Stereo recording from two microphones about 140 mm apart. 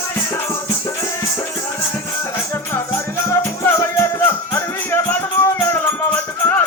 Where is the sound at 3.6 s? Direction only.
20° left (ahead or behind).